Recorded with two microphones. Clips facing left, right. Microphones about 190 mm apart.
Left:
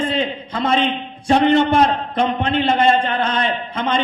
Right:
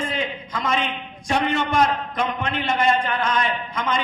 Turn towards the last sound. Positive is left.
turn(degrees=30)  # may be behind; listen again after turning